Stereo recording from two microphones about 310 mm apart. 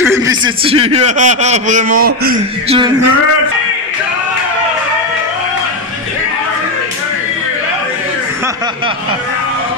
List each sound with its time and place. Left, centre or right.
0.0 s a man's voice: centre; by 2.8 s right